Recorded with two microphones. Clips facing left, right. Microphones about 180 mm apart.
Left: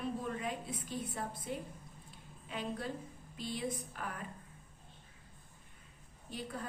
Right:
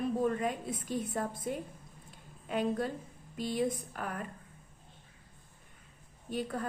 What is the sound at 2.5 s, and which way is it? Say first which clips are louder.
A woman's voice: right 8 dB; 45° right (ahead or behind).